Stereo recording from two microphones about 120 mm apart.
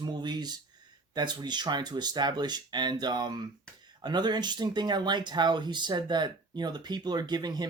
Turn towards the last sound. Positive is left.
turn(degrees=-35)  # may be behind; listen again after turning